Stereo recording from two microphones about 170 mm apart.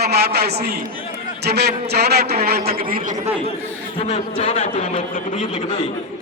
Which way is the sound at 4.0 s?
40° left (ahead or behind).